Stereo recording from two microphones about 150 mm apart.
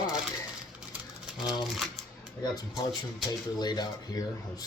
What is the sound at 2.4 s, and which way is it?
Speech, 25° left (ahead or behind).